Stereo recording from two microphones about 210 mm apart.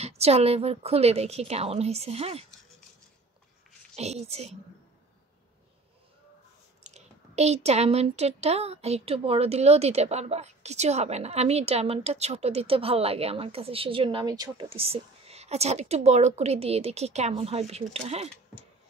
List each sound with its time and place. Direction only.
0.0 s speech: 30° right (ahead or behind)
3.9 s a woman's voice: 30° right (ahead or behind)
6.8 s speech: 30° right (ahead or behind)